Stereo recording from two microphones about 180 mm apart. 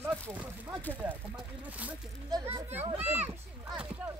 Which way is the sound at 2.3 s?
20° right (ahead or behind).